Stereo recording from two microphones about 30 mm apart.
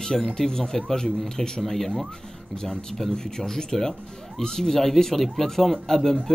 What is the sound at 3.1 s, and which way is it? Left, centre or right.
Speech, centre.